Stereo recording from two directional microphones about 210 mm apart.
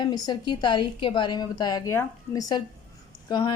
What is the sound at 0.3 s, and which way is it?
Speech, 20° left (ahead or behind).